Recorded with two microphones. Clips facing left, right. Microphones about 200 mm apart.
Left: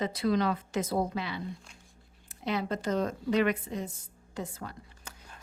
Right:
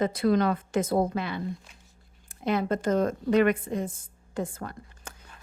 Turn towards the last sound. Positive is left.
turn(degrees=-50)  # may be behind; listen again after turning